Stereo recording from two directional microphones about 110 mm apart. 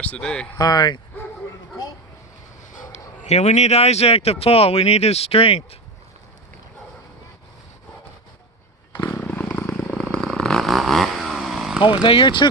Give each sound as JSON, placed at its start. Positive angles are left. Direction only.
{"t": 0.0, "sound": "speech", "side_deg": 10}
{"t": 0.5, "sound": "speech", "side_deg": 40}
{"t": 2.9, "sound": "speech", "side_deg": 85}
{"t": 9.0, "sound": "vehicle", "side_deg": 15}
{"t": 12.0, "sound": "speech", "side_deg": 50}